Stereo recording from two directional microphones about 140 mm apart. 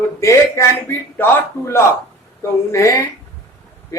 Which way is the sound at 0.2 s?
20° left (ahead or behind).